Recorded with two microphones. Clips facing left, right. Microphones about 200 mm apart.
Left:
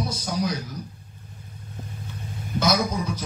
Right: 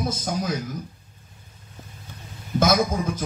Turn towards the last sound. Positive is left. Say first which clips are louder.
# right 2 dB
turn(degrees=-50)  # may be behind; listen again after turning